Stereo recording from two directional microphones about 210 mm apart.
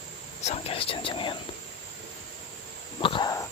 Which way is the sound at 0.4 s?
30° left (ahead or behind).